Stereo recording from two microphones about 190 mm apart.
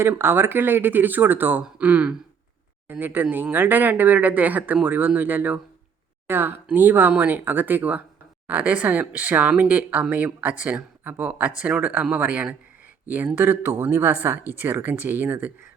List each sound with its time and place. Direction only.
0.0 s speech: 10° right (ahead or behind)